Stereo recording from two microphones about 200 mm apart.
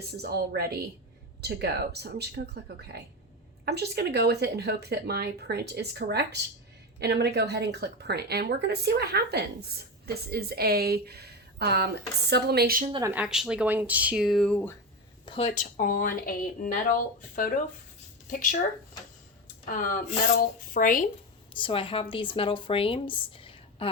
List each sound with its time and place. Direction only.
0.1 s a woman's voice: 55° right (ahead or behind)
12.9 s speech: 15° right (ahead or behind); by 14.8 s 10° left (ahead or behind)
15.3 s speech: 35° left (ahead or behind)
19.6 s a woman's voice: 45° left (ahead or behind)
21.5 s speech: 25° left (ahead or behind)